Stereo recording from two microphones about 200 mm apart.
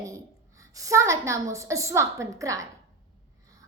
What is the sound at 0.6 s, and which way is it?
A child's voice, 15° right (ahead or behind).